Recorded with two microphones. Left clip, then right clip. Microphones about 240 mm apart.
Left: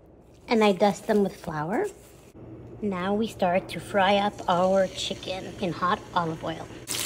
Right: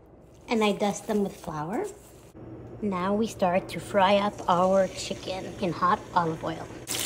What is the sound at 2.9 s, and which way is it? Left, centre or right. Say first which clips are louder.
A woman's voice: even; centre.